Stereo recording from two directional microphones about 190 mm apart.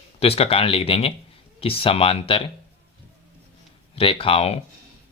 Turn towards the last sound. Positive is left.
turn(degrees=30)  # may be behind; listen again after turning